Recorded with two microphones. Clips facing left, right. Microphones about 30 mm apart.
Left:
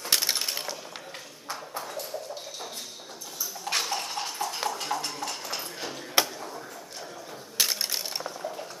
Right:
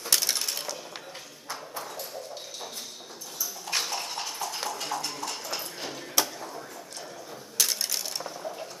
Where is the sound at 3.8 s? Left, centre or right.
Centre.